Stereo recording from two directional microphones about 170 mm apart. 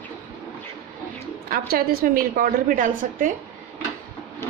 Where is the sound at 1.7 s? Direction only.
60° right (ahead or behind).